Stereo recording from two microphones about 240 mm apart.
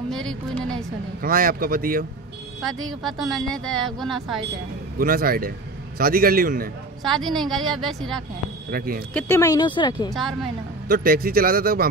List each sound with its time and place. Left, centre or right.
0.1 s speech: centre
1.2 s speech: right
3.0 s speech: centre
4.9 s speech: right
7.0 s speech: centre
8.6 s speech: right
9.1 s speech: centre
10.1 s speech: centre
10.9 s speech: right